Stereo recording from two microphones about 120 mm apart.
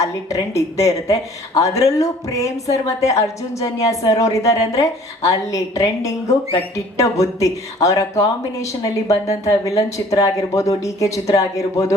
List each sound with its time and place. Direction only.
0.0 s a woman's voice: 25° left (ahead or behind)